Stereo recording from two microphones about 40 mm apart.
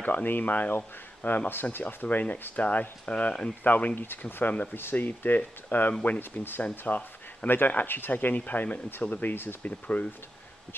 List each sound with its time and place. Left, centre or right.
0.0 s speech: left
3.6 s speech: left
9.3 s speech: left
9.6 s speech: left